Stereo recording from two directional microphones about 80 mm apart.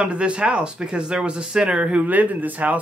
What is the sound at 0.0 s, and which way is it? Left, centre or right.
Speech, centre.